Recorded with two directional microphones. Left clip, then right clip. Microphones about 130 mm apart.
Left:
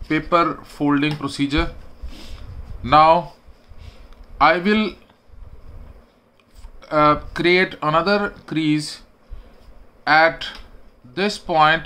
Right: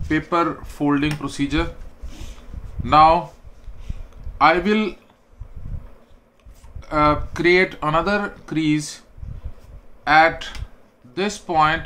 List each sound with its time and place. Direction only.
0.3 s speech: 20° left (ahead or behind)
2.8 s speech: 20° left (ahead or behind)
4.4 s speech: 20° left (ahead or behind)
6.8 s speech: 20° left (ahead or behind)
10.0 s speech: 20° left (ahead or behind)